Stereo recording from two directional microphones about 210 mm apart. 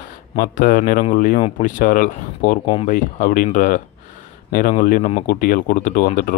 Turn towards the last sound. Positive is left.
turn(degrees=40)  # may be behind; listen again after turning